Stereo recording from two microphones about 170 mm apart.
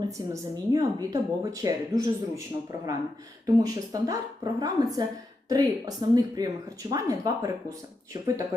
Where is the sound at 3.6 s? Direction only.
20° right (ahead or behind).